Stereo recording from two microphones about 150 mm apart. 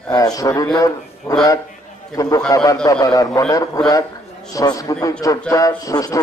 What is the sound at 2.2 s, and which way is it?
A man's voice, 20° left (ahead or behind).